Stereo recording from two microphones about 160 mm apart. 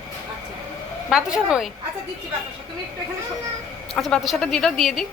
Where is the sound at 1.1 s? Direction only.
5° right (ahead or behind).